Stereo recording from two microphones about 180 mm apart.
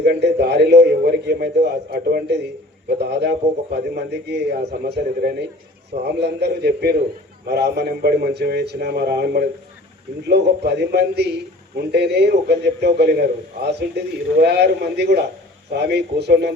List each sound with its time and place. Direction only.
0.0 s a man's voice: 65° right (ahead or behind)